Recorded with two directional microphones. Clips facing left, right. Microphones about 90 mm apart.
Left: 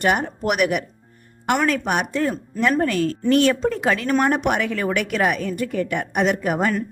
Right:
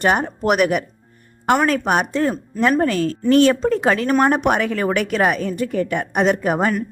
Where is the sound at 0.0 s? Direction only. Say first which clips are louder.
Right 2 dB; 35° right (ahead or behind).